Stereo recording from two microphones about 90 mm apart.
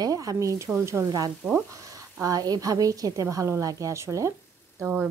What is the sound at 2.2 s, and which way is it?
A woman's voice, 45° right (ahead or behind).